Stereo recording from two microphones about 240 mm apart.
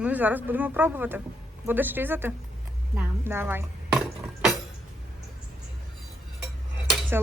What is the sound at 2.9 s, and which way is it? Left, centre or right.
Dishes, centre.